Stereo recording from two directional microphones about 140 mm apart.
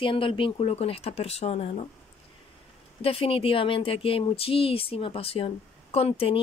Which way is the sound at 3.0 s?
40° left (ahead or behind).